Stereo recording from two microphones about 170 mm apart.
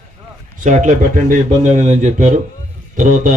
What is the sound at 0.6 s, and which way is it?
Speech, 50° right (ahead or behind).